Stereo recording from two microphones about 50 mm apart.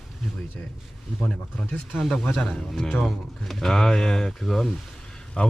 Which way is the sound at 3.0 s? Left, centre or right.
Centre.